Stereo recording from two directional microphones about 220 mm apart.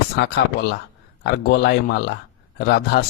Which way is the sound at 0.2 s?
50° left (ahead or behind).